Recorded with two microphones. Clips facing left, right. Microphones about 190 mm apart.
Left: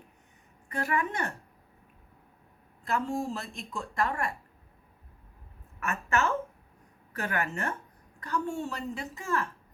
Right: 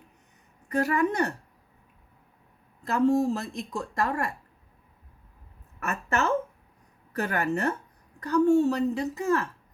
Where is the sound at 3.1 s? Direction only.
40° right (ahead or behind).